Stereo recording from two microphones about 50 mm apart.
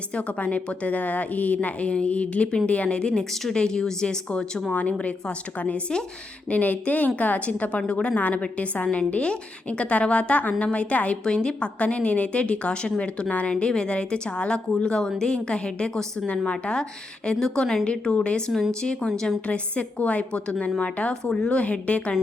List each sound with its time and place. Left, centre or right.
0.1 s a woman's voice: left
4.7 s a woman's voice: left
11.2 s a woman's voice: centre